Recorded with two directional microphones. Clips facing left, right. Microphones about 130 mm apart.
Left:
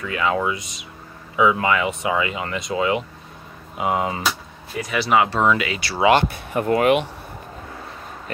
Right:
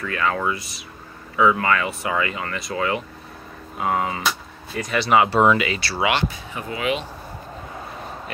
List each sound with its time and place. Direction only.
0.0 s speech: 15° left (ahead or behind)
4.7 s speech: 5° left (ahead or behind)
5.8 s speech: 15° left (ahead or behind)
6.2 s speech: 55° left (ahead or behind)